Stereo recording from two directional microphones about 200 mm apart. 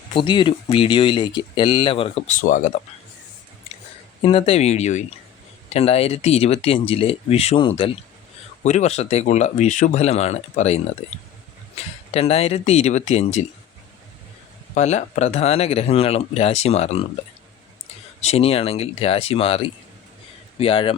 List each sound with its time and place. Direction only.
0.1 s speech: 25° left (ahead or behind)
2.4 s speech: 40° left (ahead or behind)
4.2 s speech: 30° left (ahead or behind)
14.8 s speech: 35° left (ahead or behind)
18.2 s speech: 30° left (ahead or behind)